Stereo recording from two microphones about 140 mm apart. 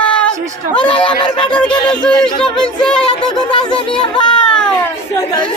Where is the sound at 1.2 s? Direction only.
35° left (ahead or behind).